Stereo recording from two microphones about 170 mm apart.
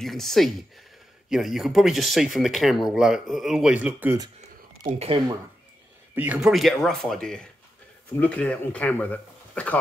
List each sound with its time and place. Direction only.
0.0 s speech: centre (ahead or behind)
4.8 s speech: 35° right (ahead or behind)
6.1 s speech: 5° right (ahead or behind)